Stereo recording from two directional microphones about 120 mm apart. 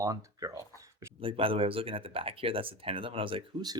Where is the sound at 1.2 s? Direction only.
50° right (ahead or behind).